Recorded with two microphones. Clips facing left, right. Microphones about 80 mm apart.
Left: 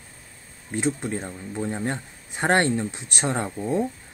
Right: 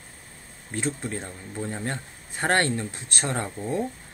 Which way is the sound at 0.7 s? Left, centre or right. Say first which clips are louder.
Left 4 dB; centre.